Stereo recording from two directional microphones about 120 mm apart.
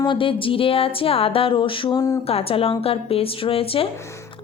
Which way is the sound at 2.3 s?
55° left (ahead or behind).